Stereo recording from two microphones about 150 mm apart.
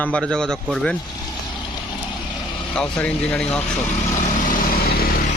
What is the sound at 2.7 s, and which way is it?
Speech, 5° left (ahead or behind).